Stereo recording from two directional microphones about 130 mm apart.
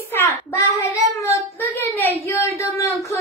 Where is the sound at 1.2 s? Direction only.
20° left (ahead or behind).